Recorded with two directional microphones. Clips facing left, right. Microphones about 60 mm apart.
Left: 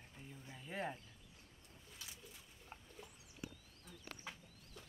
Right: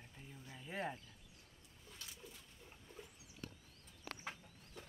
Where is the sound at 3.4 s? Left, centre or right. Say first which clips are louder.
Left 2 dB; left.